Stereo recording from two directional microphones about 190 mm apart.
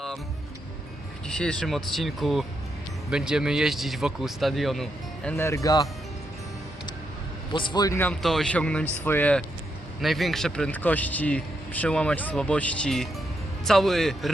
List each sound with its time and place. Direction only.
1.3 s speech: 5° left (ahead or behind)
5.4 s speech: 15° left (ahead or behind)
7.5 s speech: 25° left (ahead or behind); by 14.3 s centre (ahead or behind)